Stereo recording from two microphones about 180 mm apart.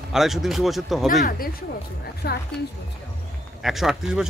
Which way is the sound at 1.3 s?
55° left (ahead or behind).